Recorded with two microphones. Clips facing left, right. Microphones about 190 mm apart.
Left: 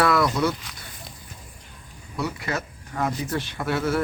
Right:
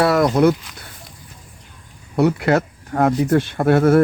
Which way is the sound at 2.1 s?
65° right (ahead or behind).